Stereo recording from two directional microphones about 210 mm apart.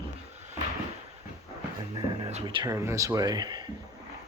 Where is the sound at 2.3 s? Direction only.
25° right (ahead or behind).